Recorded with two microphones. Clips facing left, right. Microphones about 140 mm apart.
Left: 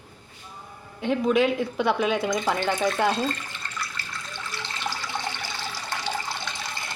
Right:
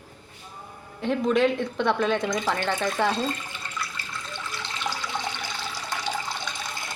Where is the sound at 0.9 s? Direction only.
Centre (ahead or behind).